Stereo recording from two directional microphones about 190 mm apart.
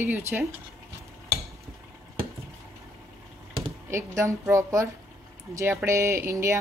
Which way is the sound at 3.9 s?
15° right (ahead or behind).